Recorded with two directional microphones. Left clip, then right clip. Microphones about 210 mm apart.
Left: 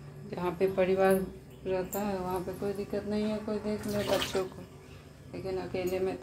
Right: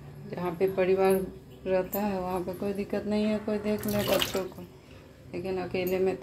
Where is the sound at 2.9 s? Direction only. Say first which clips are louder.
Right 4 dB; 20° right (ahead or behind).